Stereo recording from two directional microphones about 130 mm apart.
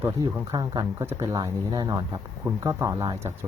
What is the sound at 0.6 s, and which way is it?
Speech, 30° right (ahead or behind).